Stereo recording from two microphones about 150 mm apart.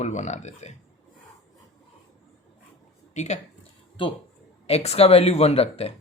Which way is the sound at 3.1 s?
50° left (ahead or behind).